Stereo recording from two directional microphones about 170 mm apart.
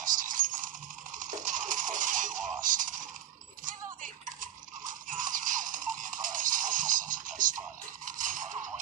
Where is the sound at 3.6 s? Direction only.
50° right (ahead or behind).